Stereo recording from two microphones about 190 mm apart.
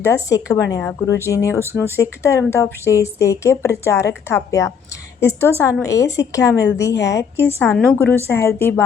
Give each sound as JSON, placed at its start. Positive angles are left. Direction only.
{"t": 0.0, "sound": "a woman's voice", "side_deg": 15}